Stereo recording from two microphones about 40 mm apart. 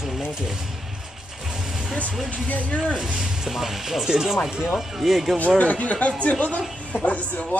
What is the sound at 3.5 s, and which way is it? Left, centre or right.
Speech, centre.